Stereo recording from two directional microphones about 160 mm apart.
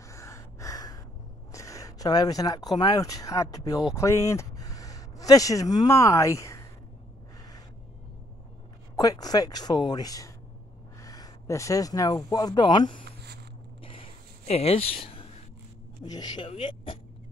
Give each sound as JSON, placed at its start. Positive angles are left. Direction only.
{"t": 0.1, "sound": "gasp", "side_deg": 20}
{"t": 1.5, "sound": "speech", "side_deg": 20}
{"t": 8.9, "sound": "speech", "side_deg": 25}
{"t": 13.0, "sound": "a sound", "side_deg": -90}
{"t": 13.8, "sound": "a sound", "side_deg": 35}
{"t": 16.0, "sound": "speech", "side_deg": 25}